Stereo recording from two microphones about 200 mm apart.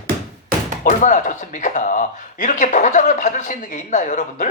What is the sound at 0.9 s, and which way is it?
Speech, 40° left (ahead or behind).